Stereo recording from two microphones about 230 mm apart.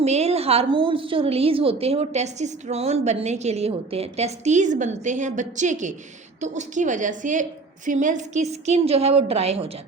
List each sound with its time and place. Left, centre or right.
0.0 s a woman's voice: right